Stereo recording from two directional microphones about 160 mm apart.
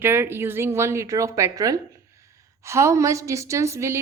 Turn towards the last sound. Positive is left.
turn(degrees=-15)  # may be behind; listen again after turning